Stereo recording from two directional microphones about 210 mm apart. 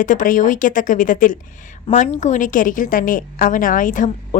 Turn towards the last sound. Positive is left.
turn(degrees=40)  # may be behind; listen again after turning